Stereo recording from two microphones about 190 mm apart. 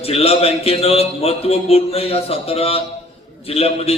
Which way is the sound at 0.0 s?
30° left (ahead or behind).